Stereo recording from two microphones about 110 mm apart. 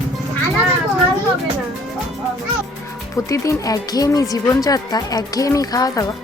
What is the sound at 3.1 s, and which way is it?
Speech, 30° left (ahead or behind).